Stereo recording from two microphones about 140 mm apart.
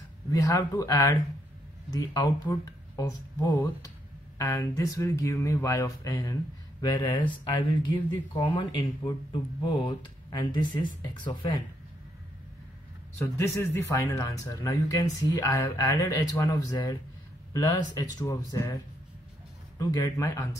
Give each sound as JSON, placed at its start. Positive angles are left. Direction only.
{"t": 0.3, "sound": "speech", "side_deg": 25}
{"t": 13.2, "sound": "speech", "side_deg": 15}
{"t": 19.9, "sound": "speech", "side_deg": 25}